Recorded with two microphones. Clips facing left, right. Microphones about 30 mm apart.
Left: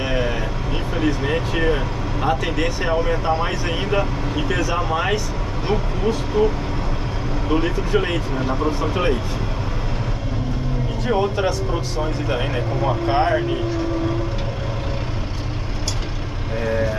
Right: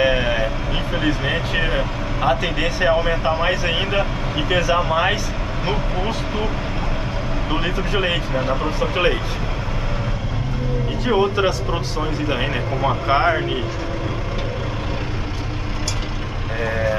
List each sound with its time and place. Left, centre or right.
0.0 s vehicle: right
0.9 s speech: right
7.5 s speech: right
8.9 s speech: right
11.1 s speech: right
16.5 s speech: right